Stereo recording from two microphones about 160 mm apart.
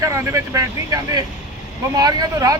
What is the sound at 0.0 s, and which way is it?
Speech, 20° right (ahead or behind).